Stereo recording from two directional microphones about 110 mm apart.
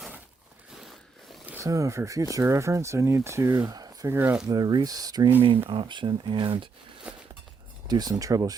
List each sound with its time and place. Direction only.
1.6 s speech: 30° right (ahead or behind)
3.7 s a sound: 35° right (ahead or behind)
4.1 s speech: 20° right (ahead or behind)
4.4 s speech: 35° right (ahead or behind)
5.6 s speech: 50° right (ahead or behind)
7.1 s walk: 10° right (ahead or behind)
7.9 s speech: 40° right (ahead or behind)